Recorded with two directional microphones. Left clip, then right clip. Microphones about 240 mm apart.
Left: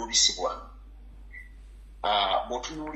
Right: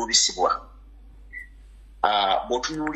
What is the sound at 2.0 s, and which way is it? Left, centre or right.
Speech, right.